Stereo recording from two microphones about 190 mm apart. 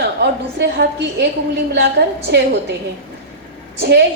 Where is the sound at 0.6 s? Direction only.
60° right (ahead or behind).